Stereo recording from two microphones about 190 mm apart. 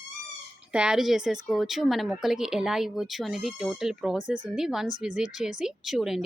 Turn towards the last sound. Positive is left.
turn(degrees=0)  # may be behind; listen again after turning